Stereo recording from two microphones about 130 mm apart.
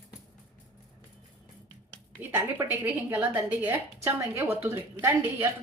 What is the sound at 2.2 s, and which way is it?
Speech, 15° right (ahead or behind).